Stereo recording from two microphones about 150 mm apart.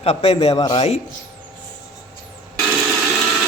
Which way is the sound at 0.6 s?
30° left (ahead or behind).